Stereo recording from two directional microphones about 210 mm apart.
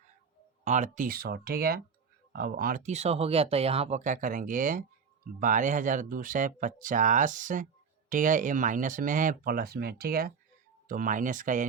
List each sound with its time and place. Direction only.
0.6 s speech: 35° right (ahead or behind)